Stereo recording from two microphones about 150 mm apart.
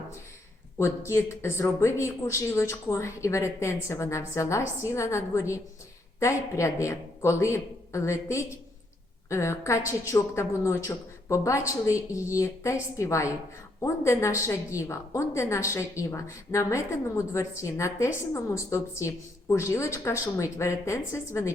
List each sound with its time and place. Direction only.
0.8 s a woman's voice: 20° left (ahead or behind)